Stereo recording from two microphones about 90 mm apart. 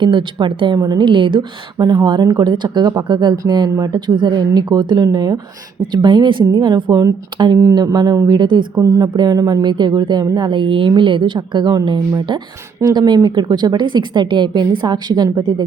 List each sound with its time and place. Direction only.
0.0 s a woman's voice: 65° right (ahead or behind); by 5.4 s 45° right (ahead or behind)
5.9 s a woman's voice: 60° right (ahead or behind); by 8.4 s 40° right (ahead or behind)
8.4 s a woman's voice: 60° right (ahead or behind)
8.7 s a woman's voice: 40° right (ahead or behind)
9.6 s a woman's voice: 55° right (ahead or behind)